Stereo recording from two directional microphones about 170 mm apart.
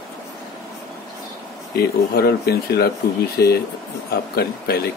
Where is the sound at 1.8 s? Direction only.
70° left (ahead or behind).